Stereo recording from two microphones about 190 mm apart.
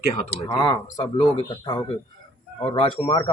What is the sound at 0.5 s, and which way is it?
A man's voice, 20° left (ahead or behind).